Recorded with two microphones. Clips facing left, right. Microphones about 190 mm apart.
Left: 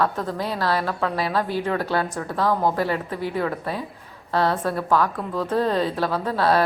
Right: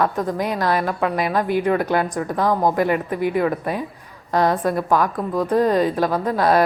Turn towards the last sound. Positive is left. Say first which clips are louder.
# right 3 dB
turn(degrees=-15)  # may be behind; listen again after turning